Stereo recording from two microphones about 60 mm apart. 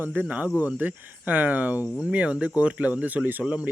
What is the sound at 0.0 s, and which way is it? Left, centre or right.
Speech, right.